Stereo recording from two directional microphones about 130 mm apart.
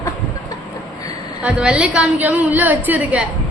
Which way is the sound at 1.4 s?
10° right (ahead or behind).